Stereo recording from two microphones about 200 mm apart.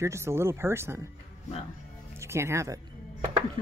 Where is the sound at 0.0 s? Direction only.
15° right (ahead or behind).